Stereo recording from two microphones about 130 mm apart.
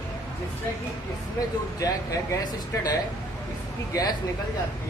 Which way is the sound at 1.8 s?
30° left (ahead or behind).